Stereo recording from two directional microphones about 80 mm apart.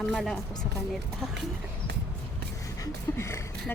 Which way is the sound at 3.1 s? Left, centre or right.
Left.